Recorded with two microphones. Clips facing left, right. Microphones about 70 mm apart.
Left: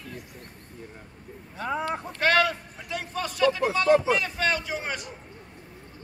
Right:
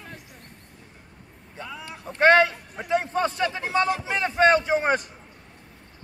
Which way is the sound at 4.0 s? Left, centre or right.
Right.